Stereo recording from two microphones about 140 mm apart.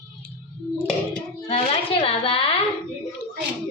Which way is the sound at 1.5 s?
45° left (ahead or behind).